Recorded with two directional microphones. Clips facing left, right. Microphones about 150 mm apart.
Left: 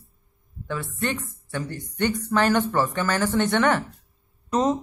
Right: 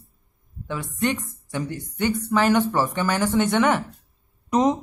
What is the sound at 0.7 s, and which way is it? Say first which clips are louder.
A man's voice: right 3 dB; 15° right (ahead or behind).